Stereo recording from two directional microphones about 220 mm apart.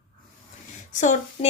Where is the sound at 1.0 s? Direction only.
35° left (ahead or behind).